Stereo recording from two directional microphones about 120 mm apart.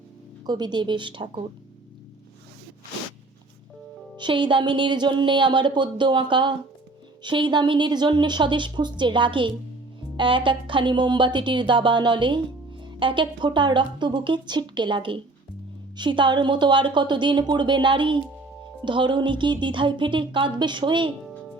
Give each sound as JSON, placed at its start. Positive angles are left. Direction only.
{"t": 0.4, "sound": "speech", "side_deg": -35}
{"t": 4.2, "sound": "speech", "side_deg": -45}